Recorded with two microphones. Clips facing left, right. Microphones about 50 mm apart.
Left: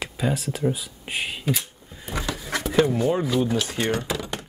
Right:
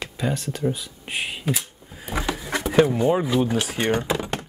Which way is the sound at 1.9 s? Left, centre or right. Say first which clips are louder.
Right 3 dB; centre.